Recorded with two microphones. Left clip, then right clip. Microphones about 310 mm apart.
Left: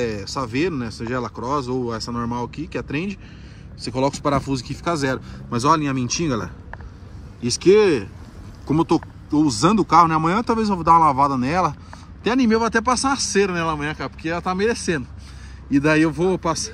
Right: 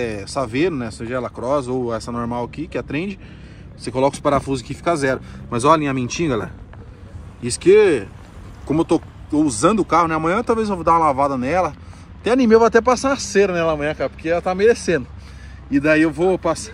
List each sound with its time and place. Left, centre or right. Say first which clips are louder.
0.0 s speech: right 2 dB; centre